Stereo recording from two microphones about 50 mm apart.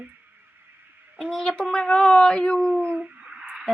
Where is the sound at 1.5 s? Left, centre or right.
Centre.